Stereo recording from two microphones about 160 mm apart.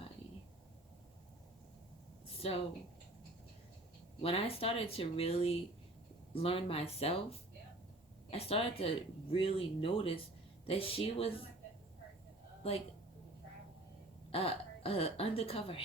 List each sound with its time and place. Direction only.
2.2 s a sound: 35° left (ahead or behind)
4.2 s speech: 35° left (ahead or behind)
14.3 s speech: 35° left (ahead or behind)